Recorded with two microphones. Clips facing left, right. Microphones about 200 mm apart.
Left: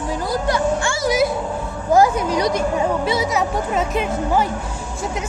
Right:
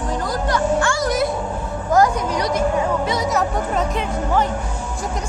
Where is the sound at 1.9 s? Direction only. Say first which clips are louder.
Left 2 dB; 10° left (ahead or behind).